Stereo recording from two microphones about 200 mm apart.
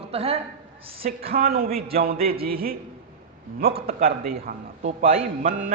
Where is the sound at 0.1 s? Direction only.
30° right (ahead or behind).